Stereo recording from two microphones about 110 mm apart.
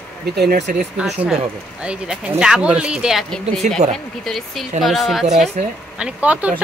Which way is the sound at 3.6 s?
90° right.